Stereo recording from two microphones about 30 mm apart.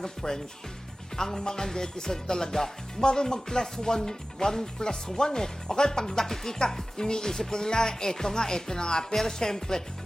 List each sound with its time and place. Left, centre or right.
0.0 s speech: centre
6.1 s speech: centre